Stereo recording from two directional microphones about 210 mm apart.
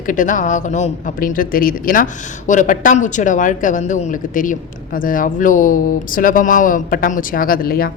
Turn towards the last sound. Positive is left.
turn(degrees=45)  # may be behind; listen again after turning